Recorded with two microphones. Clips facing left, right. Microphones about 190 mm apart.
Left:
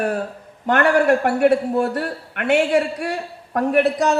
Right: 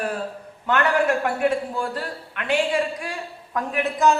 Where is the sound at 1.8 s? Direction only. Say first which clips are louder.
Left 7 dB; 65° left (ahead or behind).